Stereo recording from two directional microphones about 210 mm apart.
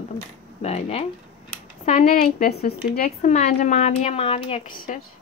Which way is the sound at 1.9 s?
40° left (ahead or behind).